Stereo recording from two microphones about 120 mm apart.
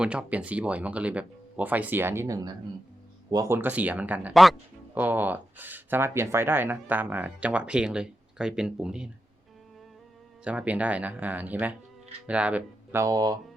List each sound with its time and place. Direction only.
0.0 s speech: 10° right (ahead or behind)
10.4 s speech: 10° right (ahead or behind)
13.0 s speech: 30° right (ahead or behind)